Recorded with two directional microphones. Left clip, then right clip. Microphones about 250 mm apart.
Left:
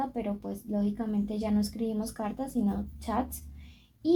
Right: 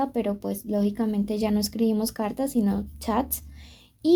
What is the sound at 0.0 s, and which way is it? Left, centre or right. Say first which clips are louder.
A woman's voice: right 7 dB; right.